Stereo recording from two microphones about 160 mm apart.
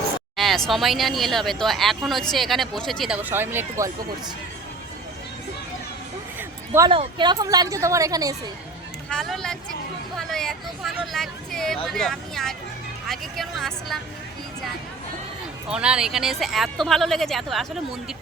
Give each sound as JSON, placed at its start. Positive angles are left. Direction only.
{"t": 0.3, "sound": "a woman's voice", "side_deg": 0}
{"t": 3.2, "sound": "speech", "side_deg": -10}
{"t": 6.9, "sound": "speech", "side_deg": -30}
{"t": 9.0, "sound": "a woman's voice", "side_deg": 5}
{"t": 15.7, "sound": "a woman's voice", "side_deg": -5}